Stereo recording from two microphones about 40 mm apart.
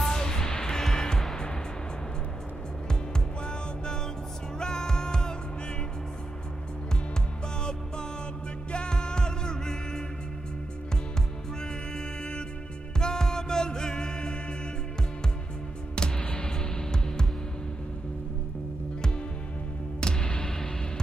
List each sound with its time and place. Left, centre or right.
0.1 s music: centre
3.4 s music: centre
8.7 s music: left
13.0 s music: centre
16.0 s music: left
20.0 s music: left